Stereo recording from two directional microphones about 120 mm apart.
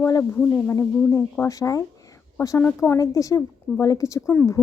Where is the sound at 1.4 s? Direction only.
25° left (ahead or behind).